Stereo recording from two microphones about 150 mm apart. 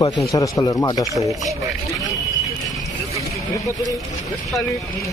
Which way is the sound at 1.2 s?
Centre (ahead or behind).